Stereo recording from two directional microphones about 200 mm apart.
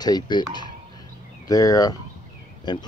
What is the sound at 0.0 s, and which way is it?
Speech, 20° left (ahead or behind).